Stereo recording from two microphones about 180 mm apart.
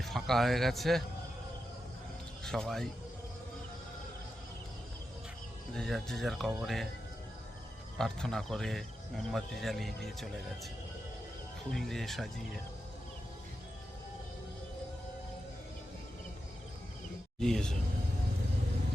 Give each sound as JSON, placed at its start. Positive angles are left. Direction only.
{"t": 0.0, "sound": "speech", "side_deg": 0}
{"t": 2.4, "sound": "speech", "side_deg": 5}
{"t": 5.7, "sound": "speech", "side_deg": 5}
{"t": 7.9, "sound": "speech", "side_deg": 0}
{"t": 11.7, "sound": "speech", "side_deg": 0}
{"t": 17.4, "sound": "speech", "side_deg": 5}